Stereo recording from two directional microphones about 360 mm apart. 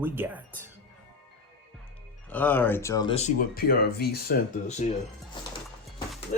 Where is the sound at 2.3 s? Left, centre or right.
Centre; by 4.8 s left.